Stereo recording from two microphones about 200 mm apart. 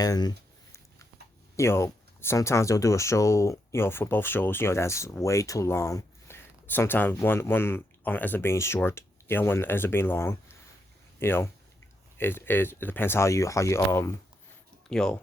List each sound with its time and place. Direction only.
0.0 s a sound: 20° left (ahead or behind)
1.5 s speech: 15° left (ahead or behind)
14.8 s speech: 5° left (ahead or behind)